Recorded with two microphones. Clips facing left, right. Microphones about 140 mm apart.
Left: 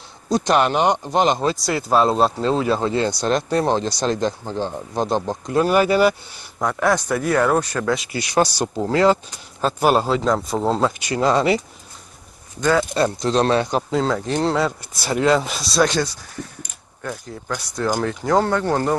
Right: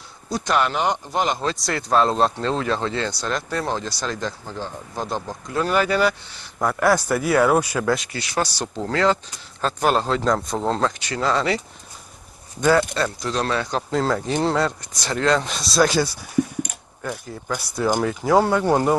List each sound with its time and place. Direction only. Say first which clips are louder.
0.3 s speech: left 4 dB; 20° left (ahead or behind)
1.5 s speech: left 2 dB; 5° left (ahead or behind); by 5.6 s 25° left (ahead or behind)
5.6 s speech: left 4 dB; 10° left (ahead or behind)
6.6 s speech: even; 5° right (ahead or behind)
8.1 s speech: left 6 dB; 15° left (ahead or behind)
12.9 s speech: left 5 dB; 20° left (ahead or behind)
13.8 s speech: left 1 dB; centre (ahead or behind)